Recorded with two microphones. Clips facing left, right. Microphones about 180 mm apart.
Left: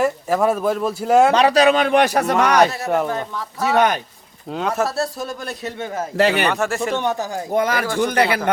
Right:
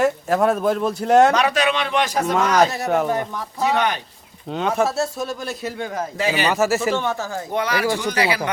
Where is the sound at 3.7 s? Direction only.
45° left (ahead or behind).